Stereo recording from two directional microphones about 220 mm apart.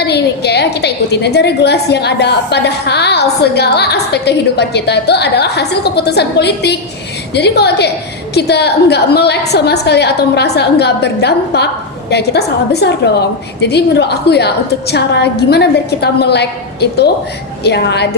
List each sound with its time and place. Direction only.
0.0 s a woman's voice: 50° left (ahead or behind)